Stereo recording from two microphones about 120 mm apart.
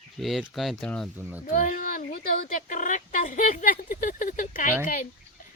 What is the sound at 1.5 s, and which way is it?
Speech, 90° left.